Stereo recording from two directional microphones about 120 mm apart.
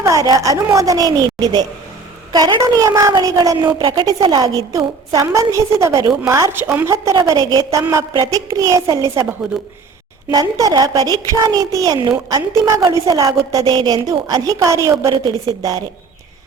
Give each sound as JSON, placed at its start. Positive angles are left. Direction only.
{"t": 0.0, "sound": "a woman's voice", "side_deg": -30}
{"t": 10.2, "sound": "a woman's voice", "side_deg": -30}